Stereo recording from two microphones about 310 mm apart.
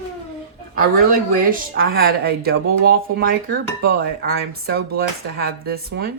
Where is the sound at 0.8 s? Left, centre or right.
Right.